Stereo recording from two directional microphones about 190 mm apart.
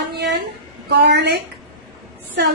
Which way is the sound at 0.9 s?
60° right (ahead or behind).